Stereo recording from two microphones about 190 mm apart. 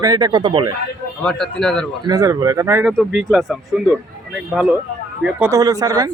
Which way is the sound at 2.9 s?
Centre (ahead or behind).